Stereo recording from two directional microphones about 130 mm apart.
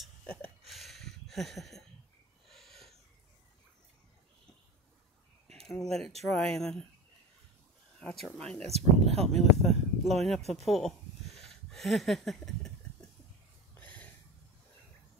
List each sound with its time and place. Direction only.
0.0 s a sound: 5° left (ahead or behind)
5.5 s speech: centre (ahead or behind)
8.0 s speech: 5° left (ahead or behind)
8.6 s speech: 55° right (ahead or behind)
9.4 s speech: centre (ahead or behind)
13.7 s a sound: 15° left (ahead or behind)